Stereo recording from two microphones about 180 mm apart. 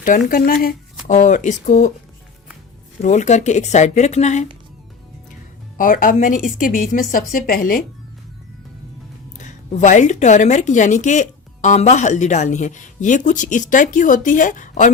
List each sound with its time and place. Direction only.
0.0 s a woman's voice: 50° left (ahead or behind)
3.0 s speech: 40° left (ahead or behind)
5.7 s a woman's voice: 50° left (ahead or behind)
9.4 s a woman's voice: 40° left (ahead or behind)